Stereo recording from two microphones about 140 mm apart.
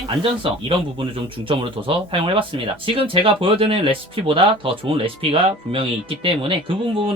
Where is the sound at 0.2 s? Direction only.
40° right (ahead or behind).